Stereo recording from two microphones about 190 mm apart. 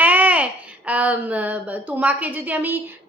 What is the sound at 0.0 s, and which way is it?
Babbling, 10° right (ahead or behind).